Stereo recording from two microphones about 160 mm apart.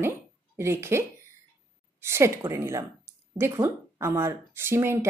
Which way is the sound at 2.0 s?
15° right (ahead or behind).